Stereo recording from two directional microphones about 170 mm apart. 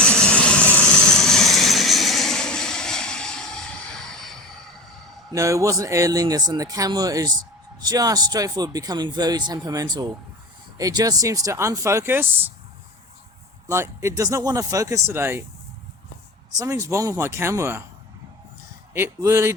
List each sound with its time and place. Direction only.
0.0 s vehicle: 5° left (ahead or behind)
5.3 s speech: 20° right (ahead or behind)
13.7 s speech: 15° right (ahead or behind)
16.6 s speech: 20° right (ahead or behind)
18.9 s speech: 15° right (ahead or behind)